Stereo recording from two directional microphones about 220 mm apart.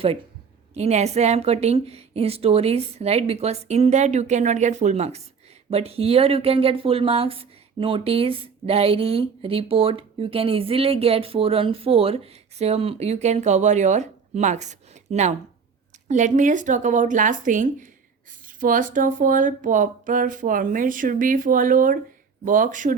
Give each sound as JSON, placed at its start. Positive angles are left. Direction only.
{"t": 0.7, "sound": "speech", "side_deg": -30}